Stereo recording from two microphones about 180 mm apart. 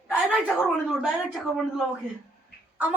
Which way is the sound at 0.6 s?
Centre (ahead or behind).